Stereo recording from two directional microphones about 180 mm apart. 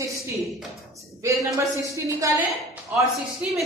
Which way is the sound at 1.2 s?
15° right (ahead or behind).